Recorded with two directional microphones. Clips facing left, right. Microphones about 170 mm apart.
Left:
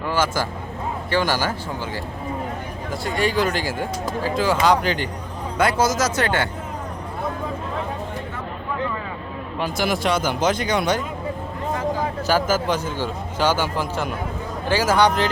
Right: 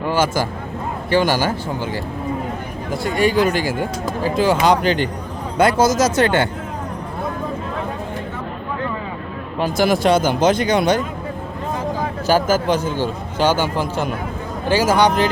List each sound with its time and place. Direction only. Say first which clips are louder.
0.0 s speech: right 4 dB; 15° right (ahead or behind)
3.4 s a man's voice: right 4 dB; 15° right (ahead or behind)
9.6 s a man's voice: right 6 dB; 35° right (ahead or behind)
12.2 s a man's voice: right 5 dB; 15° right (ahead or behind)